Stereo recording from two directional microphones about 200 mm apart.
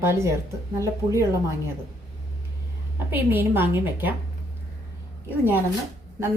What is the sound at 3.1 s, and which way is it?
A woman's voice, 10° right (ahead or behind).